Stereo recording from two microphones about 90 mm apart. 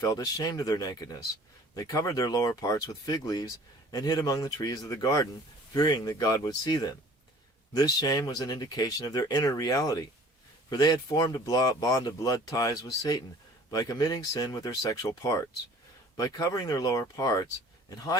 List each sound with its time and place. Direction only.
0.0 s speech: 40° left (ahead or behind)